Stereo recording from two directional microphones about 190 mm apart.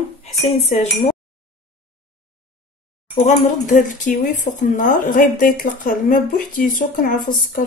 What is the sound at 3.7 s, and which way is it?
Speech, 40° left (ahead or behind).